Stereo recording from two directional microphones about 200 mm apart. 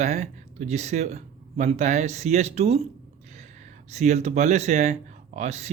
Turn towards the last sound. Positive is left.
turn(degrees=-35)  # may be behind; listen again after turning